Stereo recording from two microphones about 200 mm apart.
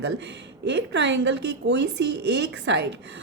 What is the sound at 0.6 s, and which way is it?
Speech, 60° right (ahead or behind).